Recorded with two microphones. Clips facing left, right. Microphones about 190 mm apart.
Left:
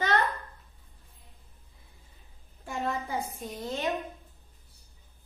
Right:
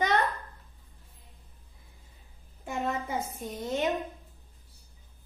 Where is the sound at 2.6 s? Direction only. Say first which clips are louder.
Right 1 dB; 20° right (ahead or behind).